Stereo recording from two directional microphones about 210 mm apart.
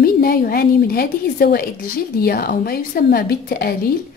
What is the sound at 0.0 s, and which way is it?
A woman's voice, 45° left (ahead or behind).